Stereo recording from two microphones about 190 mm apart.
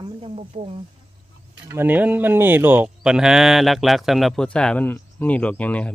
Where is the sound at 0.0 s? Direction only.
30° right (ahead or behind).